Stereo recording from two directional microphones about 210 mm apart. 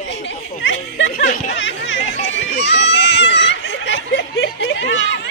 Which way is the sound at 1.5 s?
60° left (ahead or behind).